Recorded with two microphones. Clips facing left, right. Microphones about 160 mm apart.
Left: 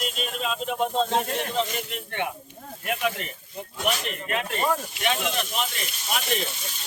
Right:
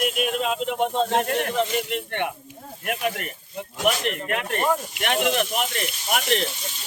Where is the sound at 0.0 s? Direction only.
65° right (ahead or behind).